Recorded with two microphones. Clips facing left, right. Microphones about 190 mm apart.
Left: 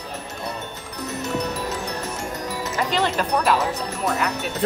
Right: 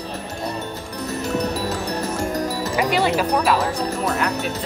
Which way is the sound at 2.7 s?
10° right (ahead or behind).